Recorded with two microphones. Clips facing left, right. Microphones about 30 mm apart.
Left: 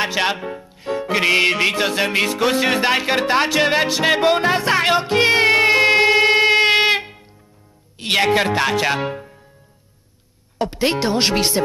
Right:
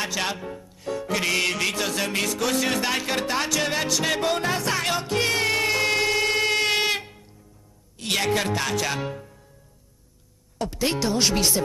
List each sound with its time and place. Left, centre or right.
0.0 s speech: left
6.0 s music: left
8.0 s speech: left
10.6 s speech: left